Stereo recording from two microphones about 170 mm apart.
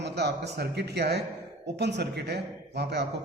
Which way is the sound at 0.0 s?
80° right.